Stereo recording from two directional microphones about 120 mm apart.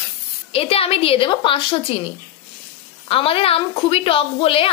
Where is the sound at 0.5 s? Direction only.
55° left (ahead or behind).